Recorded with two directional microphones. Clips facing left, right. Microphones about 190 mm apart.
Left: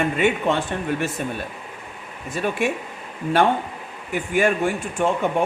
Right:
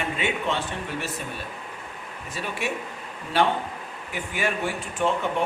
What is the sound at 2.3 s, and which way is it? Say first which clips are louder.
Speech: left 7 dB; 50° left (ahead or behind).